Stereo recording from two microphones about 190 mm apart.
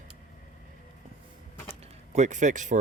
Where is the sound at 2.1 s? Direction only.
40° right (ahead or behind).